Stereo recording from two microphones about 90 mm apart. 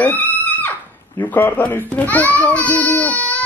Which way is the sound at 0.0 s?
20° left (ahead or behind).